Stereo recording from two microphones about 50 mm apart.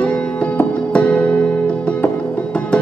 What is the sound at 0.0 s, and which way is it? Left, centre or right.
Music, left.